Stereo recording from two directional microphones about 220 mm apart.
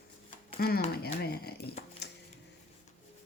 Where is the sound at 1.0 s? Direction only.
45° left (ahead or behind).